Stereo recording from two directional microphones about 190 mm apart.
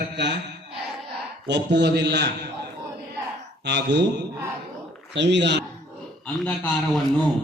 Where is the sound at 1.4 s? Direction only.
65° right (ahead or behind).